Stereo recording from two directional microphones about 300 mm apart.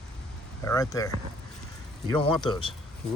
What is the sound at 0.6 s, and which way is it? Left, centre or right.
Speech, centre.